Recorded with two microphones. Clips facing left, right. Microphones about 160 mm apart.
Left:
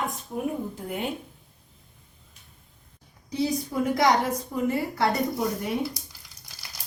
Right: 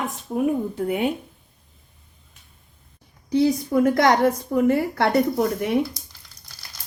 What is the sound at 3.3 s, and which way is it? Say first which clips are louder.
A woman's voice: right 8 dB; 60° right (ahead or behind).